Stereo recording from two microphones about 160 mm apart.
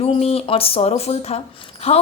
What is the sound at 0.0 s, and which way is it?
A woman's voice, 40° left (ahead or behind).